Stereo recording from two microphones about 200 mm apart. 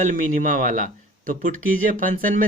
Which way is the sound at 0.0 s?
40° right (ahead or behind).